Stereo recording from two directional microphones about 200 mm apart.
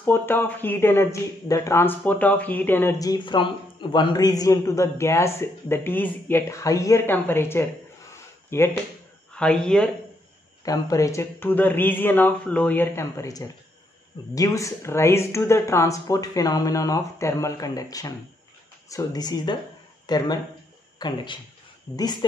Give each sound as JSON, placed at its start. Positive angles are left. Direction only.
{"t": 0.0, "sound": "speech", "side_deg": 10}
{"t": 8.1, "sound": "a sound", "side_deg": 10}
{"t": 9.3, "sound": "speech", "side_deg": 5}
{"t": 10.6, "sound": "speech", "side_deg": 15}